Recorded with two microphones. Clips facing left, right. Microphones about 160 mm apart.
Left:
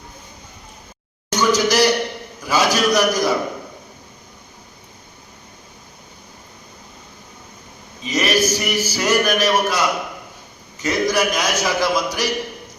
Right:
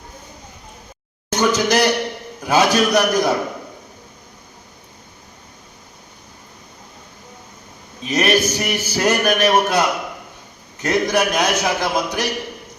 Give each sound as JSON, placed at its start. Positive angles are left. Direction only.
{"t": 1.3, "sound": "a man's voice", "side_deg": -55}
{"t": 8.1, "sound": "a man's voice", "side_deg": -60}